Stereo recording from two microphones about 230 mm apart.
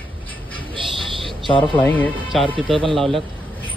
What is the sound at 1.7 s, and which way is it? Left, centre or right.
Speech, centre.